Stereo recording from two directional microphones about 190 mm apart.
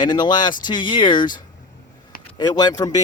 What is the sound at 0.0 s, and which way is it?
Speech, 25° left (ahead or behind).